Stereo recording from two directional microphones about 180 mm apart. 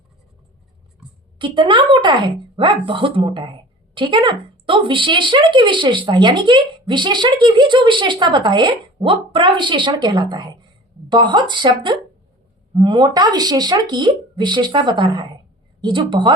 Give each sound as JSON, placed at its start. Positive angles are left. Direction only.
{"t": 1.4, "sound": "speech", "side_deg": -25}